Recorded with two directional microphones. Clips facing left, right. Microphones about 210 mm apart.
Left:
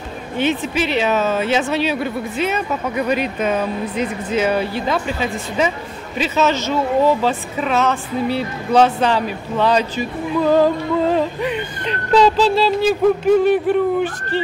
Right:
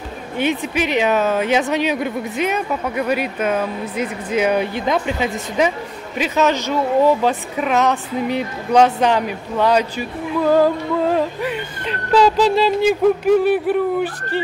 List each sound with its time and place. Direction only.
0.4 s speech: 15° right (ahead or behind)